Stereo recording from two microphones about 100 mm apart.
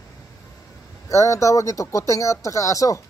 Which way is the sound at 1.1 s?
30° left (ahead or behind).